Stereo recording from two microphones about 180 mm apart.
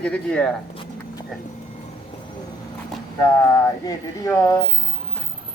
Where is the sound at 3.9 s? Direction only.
20° left (ahead or behind).